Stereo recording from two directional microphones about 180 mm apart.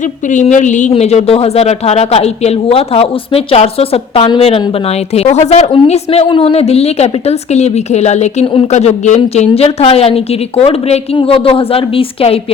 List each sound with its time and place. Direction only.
0.0 s speech: 45° left (ahead or behind)